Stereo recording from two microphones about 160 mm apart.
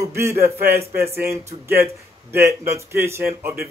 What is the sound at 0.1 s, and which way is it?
Speech, 15° right (ahead or behind).